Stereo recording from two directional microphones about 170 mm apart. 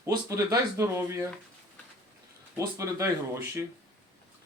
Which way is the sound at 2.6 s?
15° right (ahead or behind).